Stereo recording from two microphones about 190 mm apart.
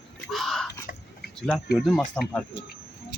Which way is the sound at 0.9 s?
45° left (ahead or behind).